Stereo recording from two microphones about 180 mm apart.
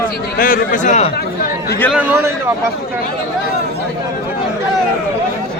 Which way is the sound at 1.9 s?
15° right (ahead or behind).